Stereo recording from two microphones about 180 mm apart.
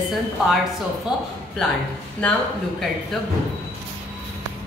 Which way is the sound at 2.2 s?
5° left (ahead or behind).